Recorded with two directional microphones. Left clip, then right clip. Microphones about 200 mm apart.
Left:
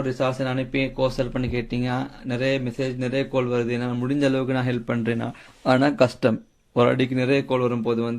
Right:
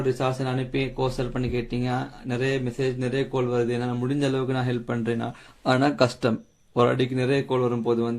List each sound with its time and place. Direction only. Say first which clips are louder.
0.1 s speech: left 2 dB; 35° left (ahead or behind)